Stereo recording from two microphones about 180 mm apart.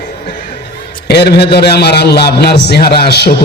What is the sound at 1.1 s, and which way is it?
A man's voice, 65° left (ahead or behind).